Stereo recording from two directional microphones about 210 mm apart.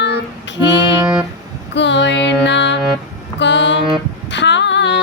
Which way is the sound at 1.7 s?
55° left (ahead or behind).